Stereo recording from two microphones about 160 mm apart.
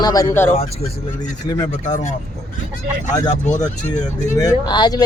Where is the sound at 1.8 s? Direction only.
50° left (ahead or behind).